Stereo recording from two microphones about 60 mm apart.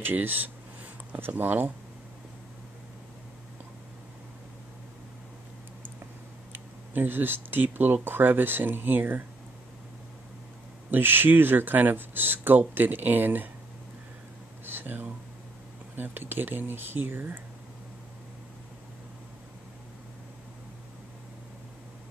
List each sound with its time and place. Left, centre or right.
0.0 s speech: right
6.5 s speech: right
10.9 s speech: right
14.7 s speech: right